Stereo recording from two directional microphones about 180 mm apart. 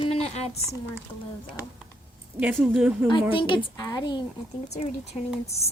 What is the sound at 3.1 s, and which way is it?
A woman's voice, 30° left (ahead or behind).